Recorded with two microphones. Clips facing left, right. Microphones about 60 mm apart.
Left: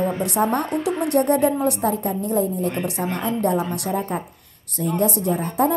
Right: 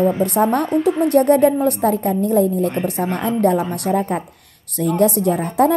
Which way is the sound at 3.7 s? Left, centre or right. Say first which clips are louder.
Right 5 dB; right.